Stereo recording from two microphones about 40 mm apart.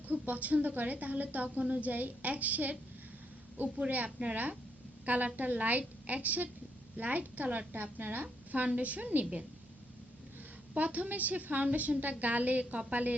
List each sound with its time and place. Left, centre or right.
0.1 s a woman's voice: right
3.8 s a woman's voice: right
10.8 s a woman's voice: right